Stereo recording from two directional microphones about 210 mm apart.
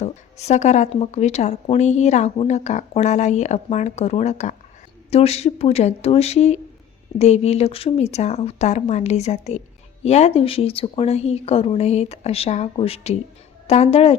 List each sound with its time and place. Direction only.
0.0 s speech: 30° left (ahead or behind)